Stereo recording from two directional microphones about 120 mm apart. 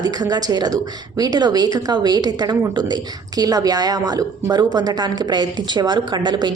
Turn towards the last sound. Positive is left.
turn(degrees=-35)  # may be behind; listen again after turning